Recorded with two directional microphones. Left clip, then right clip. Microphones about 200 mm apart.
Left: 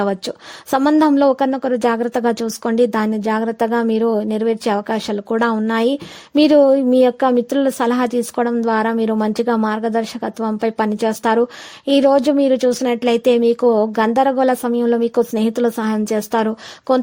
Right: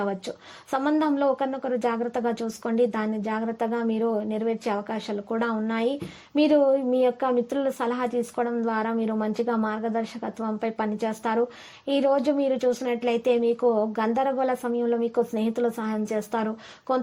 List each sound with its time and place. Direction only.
0.0 s a woman's voice: 50° left (ahead or behind)